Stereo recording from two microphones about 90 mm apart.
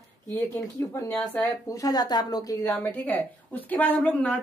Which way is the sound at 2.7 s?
20° left (ahead or behind).